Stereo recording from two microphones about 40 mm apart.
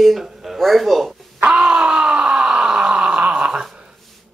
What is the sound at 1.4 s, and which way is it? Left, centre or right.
Groan, right.